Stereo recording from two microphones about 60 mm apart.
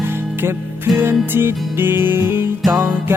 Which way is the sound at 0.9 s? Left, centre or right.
Right.